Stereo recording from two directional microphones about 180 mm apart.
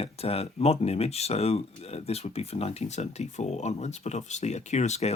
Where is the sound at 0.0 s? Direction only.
35° left (ahead or behind).